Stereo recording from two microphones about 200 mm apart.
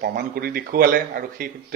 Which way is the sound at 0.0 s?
50° right (ahead or behind).